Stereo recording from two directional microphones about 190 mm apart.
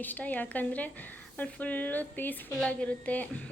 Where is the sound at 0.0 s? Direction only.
10° left (ahead or behind).